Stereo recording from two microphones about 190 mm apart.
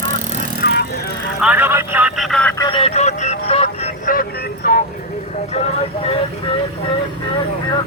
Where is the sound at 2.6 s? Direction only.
25° left (ahead or behind).